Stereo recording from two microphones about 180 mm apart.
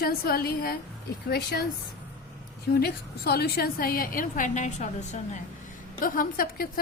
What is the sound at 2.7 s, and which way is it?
A woman's voice, 60° left (ahead or behind).